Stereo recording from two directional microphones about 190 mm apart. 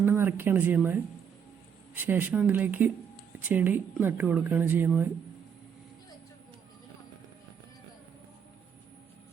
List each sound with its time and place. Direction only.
0.0 s speech: 10° right (ahead or behind)
2.0 s speech: 10° right (ahead or behind)